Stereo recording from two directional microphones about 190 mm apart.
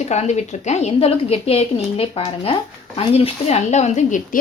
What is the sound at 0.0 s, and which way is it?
A woman's voice, 35° left (ahead or behind).